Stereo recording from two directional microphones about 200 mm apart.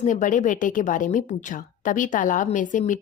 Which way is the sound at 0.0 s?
35° left (ahead or behind).